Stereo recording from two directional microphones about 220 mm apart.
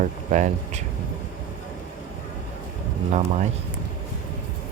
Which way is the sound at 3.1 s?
30° right (ahead or behind).